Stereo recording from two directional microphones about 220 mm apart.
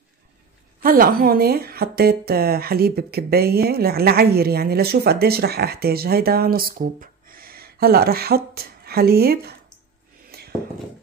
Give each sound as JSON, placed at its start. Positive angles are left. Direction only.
{"t": 0.8, "sound": "a woman's voice", "side_deg": -40}